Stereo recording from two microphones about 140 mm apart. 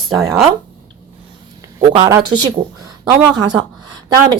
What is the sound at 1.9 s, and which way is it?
Speech, 25° right (ahead or behind).